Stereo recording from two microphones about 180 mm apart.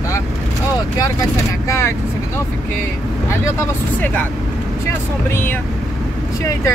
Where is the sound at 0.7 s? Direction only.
20° left (ahead or behind).